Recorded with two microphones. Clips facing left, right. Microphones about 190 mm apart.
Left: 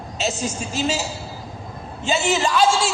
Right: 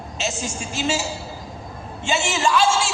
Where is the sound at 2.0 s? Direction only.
35° left (ahead or behind).